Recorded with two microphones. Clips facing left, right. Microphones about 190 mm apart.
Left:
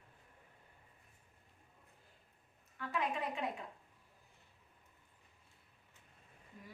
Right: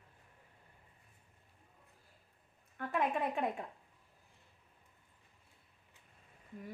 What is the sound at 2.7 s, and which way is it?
Speech, 50° right (ahead or behind).